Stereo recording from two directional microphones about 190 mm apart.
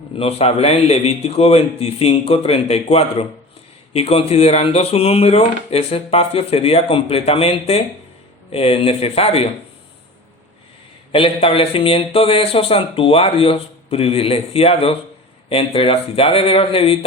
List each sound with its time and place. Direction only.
0.2 s speech: 35° left (ahead or behind)
11.1 s speech: 30° left (ahead or behind)